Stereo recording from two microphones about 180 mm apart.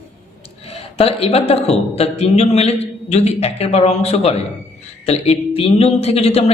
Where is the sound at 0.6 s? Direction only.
35° left (ahead or behind).